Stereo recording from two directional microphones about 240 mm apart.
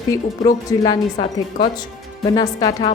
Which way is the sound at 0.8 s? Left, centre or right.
Centre.